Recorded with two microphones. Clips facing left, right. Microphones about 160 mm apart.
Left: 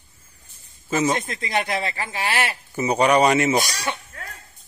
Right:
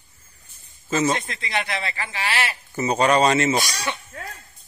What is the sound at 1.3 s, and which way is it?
Speech, 40° left (ahead or behind).